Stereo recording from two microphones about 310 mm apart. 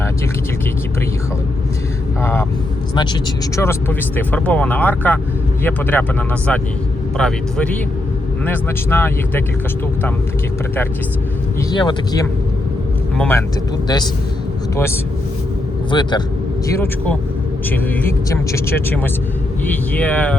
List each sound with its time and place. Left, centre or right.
2.2 s vehicle: centre
2.9 s speech: centre
11.7 s a man's voice: centre
15.9 s speech: centre